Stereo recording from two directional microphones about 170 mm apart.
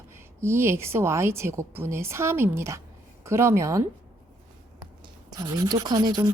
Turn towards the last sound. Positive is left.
turn(degrees=-25)  # may be behind; listen again after turning